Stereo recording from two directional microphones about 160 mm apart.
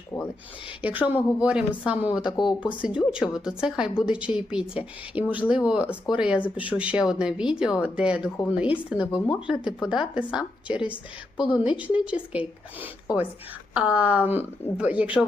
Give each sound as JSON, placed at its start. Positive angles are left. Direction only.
{"t": 0.1, "sound": "a sound", "side_deg": 25}
{"t": 0.8, "sound": "a woman's voice", "side_deg": -10}
{"t": 2.2, "sound": "speech", "side_deg": 25}
{"t": 2.6, "sound": "a woman's voice", "side_deg": -10}
{"t": 9.6, "sound": "speech", "side_deg": 30}
{"t": 10.7, "sound": "a woman's voice", "side_deg": -10}